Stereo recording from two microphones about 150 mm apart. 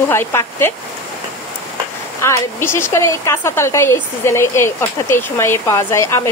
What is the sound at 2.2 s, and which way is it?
A woman's voice, 20° left (ahead or behind).